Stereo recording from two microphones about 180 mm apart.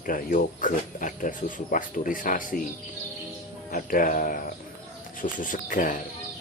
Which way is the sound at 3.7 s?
50° left (ahead or behind).